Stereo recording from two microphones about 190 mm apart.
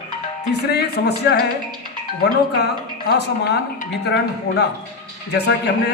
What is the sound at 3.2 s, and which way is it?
Speech, 60° left (ahead or behind).